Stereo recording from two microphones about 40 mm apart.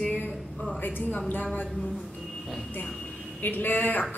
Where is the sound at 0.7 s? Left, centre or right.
Left.